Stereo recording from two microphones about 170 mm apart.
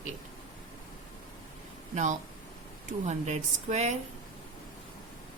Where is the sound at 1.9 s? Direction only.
45° right (ahead or behind).